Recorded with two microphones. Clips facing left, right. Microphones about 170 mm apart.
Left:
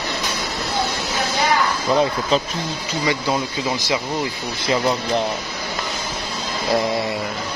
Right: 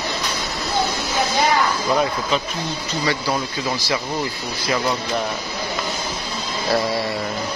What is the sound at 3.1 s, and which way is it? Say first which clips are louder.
Speech: left 2 dB; 15° left (ahead or behind).